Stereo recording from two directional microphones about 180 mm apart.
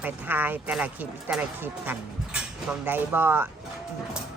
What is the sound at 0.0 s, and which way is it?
Speech, 10° right (ahead or behind).